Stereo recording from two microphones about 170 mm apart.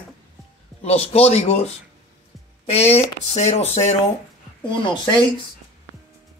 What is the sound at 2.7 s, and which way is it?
Speech, 40° left (ahead or behind).